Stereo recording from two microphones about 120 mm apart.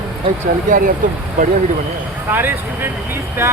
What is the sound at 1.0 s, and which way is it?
Speech, 90° right.